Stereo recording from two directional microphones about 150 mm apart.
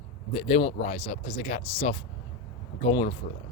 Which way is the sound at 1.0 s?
45° left (ahead or behind).